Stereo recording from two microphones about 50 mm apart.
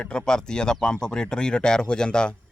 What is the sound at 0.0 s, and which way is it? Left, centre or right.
Speech, centre.